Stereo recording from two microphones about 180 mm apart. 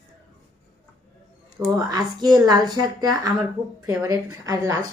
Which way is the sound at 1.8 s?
20° right (ahead or behind).